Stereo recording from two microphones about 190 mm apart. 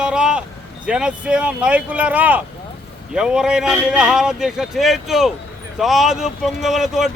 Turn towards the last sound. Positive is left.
turn(degrees=0)  # may be behind; listen again after turning